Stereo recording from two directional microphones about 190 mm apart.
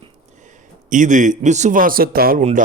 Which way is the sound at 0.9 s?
40° right (ahead or behind).